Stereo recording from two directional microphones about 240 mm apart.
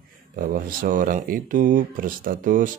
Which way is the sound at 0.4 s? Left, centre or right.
Right.